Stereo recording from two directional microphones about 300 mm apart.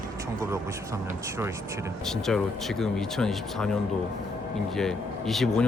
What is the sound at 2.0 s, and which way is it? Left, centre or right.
Speech, centre.